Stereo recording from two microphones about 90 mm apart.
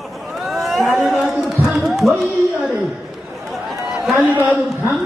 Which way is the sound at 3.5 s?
Centre (ahead or behind).